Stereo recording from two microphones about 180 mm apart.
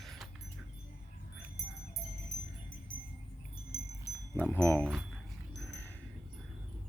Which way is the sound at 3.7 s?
60° left (ahead or behind).